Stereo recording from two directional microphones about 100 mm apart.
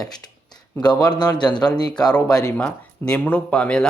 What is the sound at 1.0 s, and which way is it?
Speech, 45° left (ahead or behind).